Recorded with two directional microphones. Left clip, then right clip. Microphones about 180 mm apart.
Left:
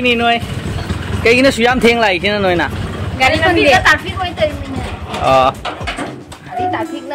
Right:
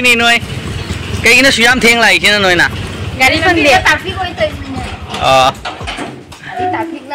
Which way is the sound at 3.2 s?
25° right (ahead or behind).